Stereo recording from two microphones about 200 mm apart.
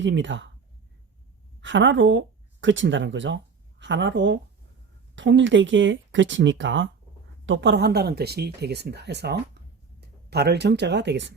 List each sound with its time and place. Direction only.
0.0 s speech: 65° right (ahead or behind)
1.6 s speech: 65° right (ahead or behind)